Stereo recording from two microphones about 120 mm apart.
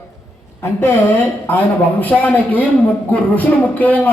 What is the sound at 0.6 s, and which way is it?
A man's voice, 20° left (ahead or behind).